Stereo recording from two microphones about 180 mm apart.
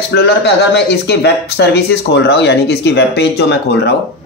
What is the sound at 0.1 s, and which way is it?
Speech, 70° left (ahead or behind).